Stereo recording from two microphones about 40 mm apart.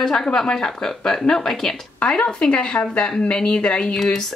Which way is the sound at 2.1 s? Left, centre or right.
Left.